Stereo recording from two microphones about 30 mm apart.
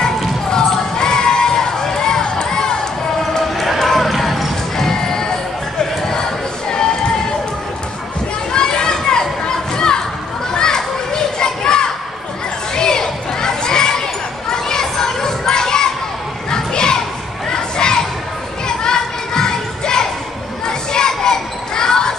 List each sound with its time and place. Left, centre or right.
0.0 s basketball bounce: left
2.2 s crowd: left
3.5 s music: centre
4.7 s music: centre
5.8 s a sound: left
8.5 s children playing: left
12.7 s crowd: left
14.5 s children playing: left
17.5 s a sound: left
18.9 s music: left
20.6 s basketball bounce: left